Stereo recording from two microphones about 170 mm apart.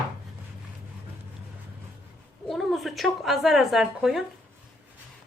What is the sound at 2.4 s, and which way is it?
A woman's voice, centre (ahead or behind).